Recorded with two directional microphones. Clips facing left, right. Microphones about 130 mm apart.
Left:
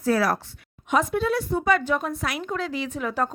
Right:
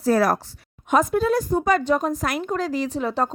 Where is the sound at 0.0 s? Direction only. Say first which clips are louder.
Right 3 dB; 45° right (ahead or behind).